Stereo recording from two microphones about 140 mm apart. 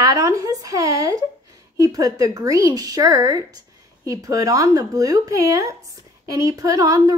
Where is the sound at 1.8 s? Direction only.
25° right (ahead or behind).